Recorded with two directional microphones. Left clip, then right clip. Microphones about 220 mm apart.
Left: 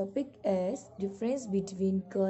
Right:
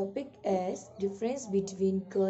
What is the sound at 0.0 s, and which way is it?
Speech, 20° left (ahead or behind).